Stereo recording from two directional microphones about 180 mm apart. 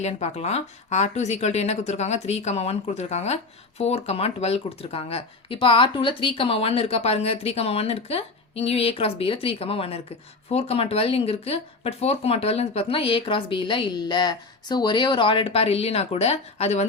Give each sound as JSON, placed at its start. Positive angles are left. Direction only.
{"t": 0.0, "sound": "speech", "side_deg": 40}